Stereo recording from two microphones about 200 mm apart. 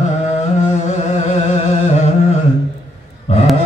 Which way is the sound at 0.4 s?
35° left (ahead or behind).